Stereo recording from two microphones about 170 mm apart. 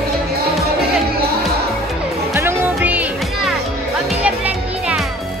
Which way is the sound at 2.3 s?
15° right (ahead or behind).